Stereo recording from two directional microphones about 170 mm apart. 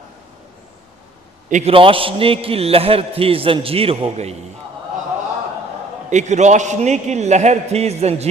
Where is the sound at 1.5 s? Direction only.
45° right (ahead or behind).